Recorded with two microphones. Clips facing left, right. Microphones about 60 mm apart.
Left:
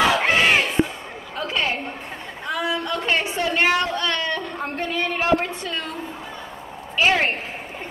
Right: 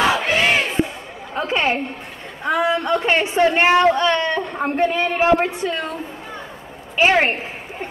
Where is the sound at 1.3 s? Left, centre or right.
Right.